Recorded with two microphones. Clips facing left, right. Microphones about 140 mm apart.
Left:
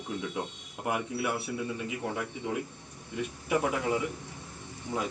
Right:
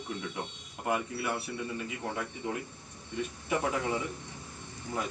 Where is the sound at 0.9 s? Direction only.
15° left (ahead or behind).